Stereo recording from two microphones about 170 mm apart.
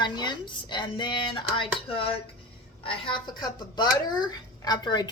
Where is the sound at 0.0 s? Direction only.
25° left (ahead or behind).